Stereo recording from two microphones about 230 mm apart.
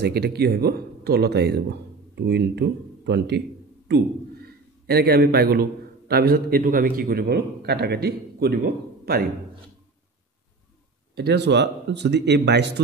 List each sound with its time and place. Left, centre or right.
0.0 s a man's voice: right
11.1 s speech: right